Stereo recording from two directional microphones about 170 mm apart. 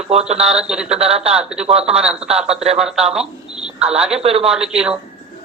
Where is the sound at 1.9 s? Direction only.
5° right (ahead or behind).